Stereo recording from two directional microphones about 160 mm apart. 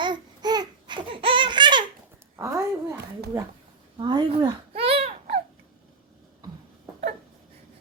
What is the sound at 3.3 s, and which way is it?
Speech, 15° right (ahead or behind).